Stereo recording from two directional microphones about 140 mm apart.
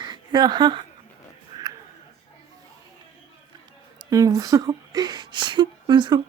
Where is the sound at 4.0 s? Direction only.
25° right (ahead or behind).